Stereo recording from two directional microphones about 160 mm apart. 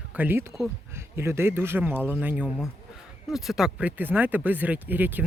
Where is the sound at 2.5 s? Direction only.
Centre (ahead or behind).